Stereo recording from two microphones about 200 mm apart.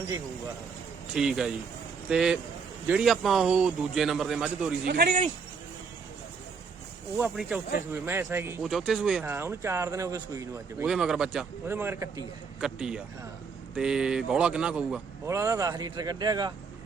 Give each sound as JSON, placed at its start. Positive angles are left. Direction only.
{"t": 1.1, "sound": "a man's voice", "side_deg": 0}
{"t": 4.9, "sound": "speech", "side_deg": -50}
{"t": 7.2, "sound": "a man's voice", "side_deg": 0}
{"t": 10.8, "sound": "a man's voice", "side_deg": 0}
{"t": 15.3, "sound": "a man's voice", "side_deg": -15}